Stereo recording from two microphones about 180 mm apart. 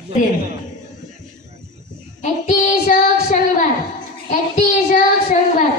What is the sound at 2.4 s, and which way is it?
Child singing, 40° left (ahead or behind).